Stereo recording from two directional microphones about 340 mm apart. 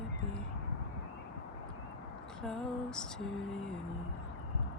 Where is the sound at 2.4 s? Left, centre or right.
Centre.